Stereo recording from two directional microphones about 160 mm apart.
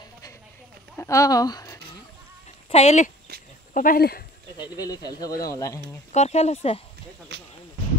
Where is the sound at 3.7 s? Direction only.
60° left (ahead or behind).